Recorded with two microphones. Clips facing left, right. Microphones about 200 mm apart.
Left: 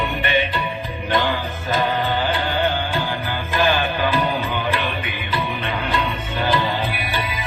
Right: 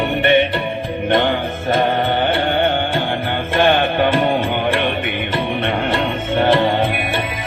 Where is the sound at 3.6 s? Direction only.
65° right (ahead or behind).